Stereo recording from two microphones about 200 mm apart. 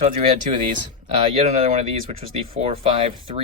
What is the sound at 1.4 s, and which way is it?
Speech, 35° right (ahead or behind).